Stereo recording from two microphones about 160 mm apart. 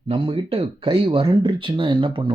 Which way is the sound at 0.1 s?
35° right (ahead or behind).